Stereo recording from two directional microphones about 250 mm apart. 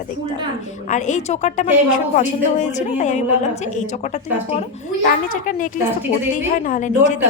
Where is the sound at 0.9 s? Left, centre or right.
Left.